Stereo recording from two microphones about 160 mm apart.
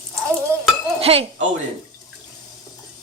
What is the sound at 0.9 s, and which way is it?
Chink, 40° right (ahead or behind).